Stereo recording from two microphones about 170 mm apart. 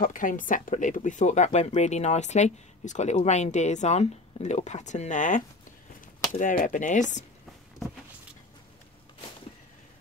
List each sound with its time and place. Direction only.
0.0 s speech: 50° left (ahead or behind)
6.4 s speech: 50° left (ahead or behind)